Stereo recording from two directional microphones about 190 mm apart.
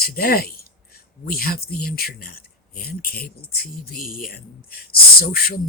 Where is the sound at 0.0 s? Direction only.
50° left (ahead or behind).